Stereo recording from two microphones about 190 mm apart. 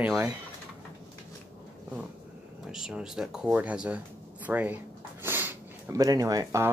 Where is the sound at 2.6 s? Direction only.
Centre (ahead or behind).